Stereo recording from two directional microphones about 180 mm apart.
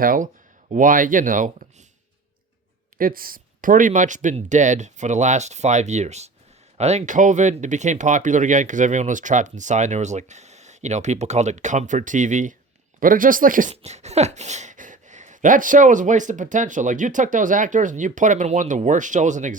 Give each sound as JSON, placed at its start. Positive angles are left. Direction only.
{"t": 0.0, "sound": "speech", "side_deg": -50}
{"t": 3.0, "sound": "speech", "side_deg": -55}